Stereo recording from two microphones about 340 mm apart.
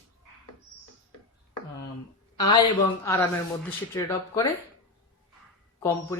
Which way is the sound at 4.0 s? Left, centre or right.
Centre.